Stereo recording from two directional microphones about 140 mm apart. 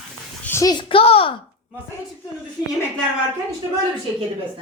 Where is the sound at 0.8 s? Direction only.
45° left (ahead or behind).